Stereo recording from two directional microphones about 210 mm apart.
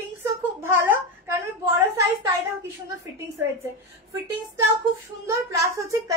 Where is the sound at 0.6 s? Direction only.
10° right (ahead or behind).